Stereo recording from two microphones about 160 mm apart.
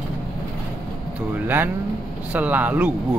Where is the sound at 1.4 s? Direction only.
10° right (ahead or behind).